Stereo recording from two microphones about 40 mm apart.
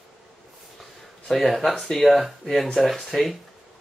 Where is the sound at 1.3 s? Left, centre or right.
Centre.